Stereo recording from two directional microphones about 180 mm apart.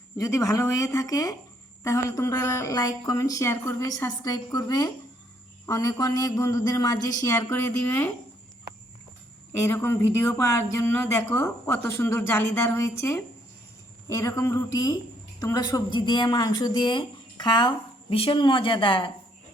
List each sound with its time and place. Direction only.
0.2 s a woman's voice: 20° left (ahead or behind)
9.6 s a woman's voice: 15° left (ahead or behind)